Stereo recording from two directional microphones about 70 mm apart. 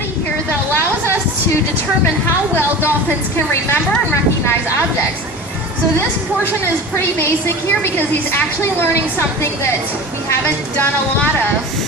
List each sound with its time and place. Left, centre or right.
3.3 s a woman's voice: left
7.2 s a woman's voice: left